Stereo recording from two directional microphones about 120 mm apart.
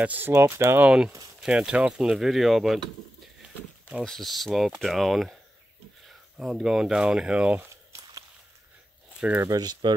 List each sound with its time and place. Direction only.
0.0 s speech: 15° right (ahead or behind)
0.8 s speech: 10° right (ahead or behind)
4.0 s speech: centre (ahead or behind)
7.7 s walk: 25° right (ahead or behind)
9.2 s speech: 10° right (ahead or behind)
9.5 s speech: 35° right (ahead or behind)